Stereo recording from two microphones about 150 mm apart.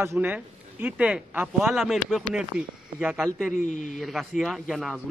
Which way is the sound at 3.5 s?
55° left (ahead or behind).